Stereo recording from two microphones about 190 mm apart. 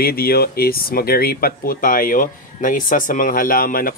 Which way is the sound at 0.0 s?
55° left (ahead or behind).